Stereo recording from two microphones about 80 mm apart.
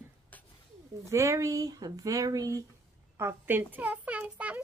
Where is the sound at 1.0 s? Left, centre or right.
Right.